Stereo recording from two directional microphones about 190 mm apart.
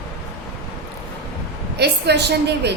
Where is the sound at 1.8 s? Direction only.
60° right (ahead or behind).